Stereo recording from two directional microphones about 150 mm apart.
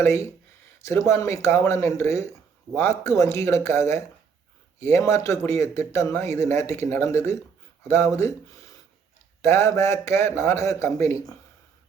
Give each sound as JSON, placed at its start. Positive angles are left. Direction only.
{"t": 0.0, "sound": "a man's voice", "side_deg": 15}
{"t": 9.4, "sound": "a man's voice", "side_deg": 20}